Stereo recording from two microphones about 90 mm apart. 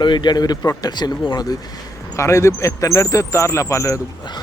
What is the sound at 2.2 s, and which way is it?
Speech, 35° left (ahead or behind).